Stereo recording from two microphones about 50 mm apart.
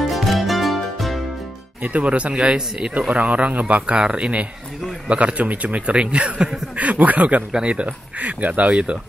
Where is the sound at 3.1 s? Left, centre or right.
Right.